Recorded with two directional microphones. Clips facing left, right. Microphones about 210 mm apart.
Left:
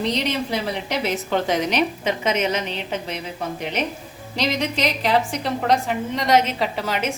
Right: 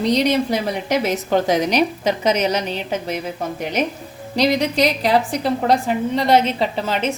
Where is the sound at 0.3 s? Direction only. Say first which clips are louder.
Right 5 dB; 45° right (ahead or behind).